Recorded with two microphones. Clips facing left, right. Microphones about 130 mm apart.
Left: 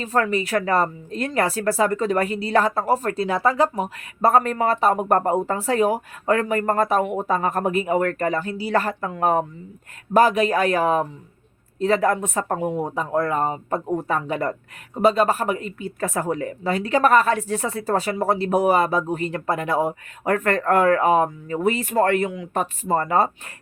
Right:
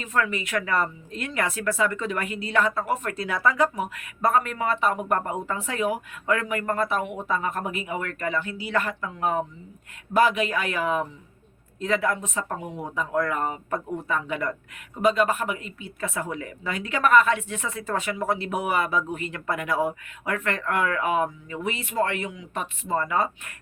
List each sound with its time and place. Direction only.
0.0 s speech: 35° left (ahead or behind)
9.0 s speech: 50° left (ahead or behind)
12.9 s speech: 35° left (ahead or behind)
20.2 s speech: 45° left (ahead or behind)